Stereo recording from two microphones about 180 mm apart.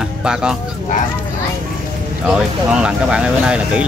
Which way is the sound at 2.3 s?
5° right (ahead or behind).